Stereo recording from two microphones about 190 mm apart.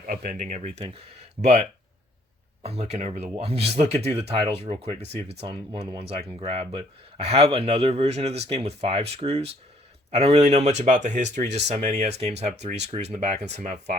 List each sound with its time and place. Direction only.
0.1 s speech: 45° right (ahead or behind)
2.6 s speech: 30° right (ahead or behind)